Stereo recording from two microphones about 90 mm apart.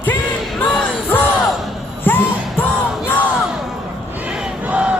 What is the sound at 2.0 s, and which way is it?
Music, 20° left (ahead or behind).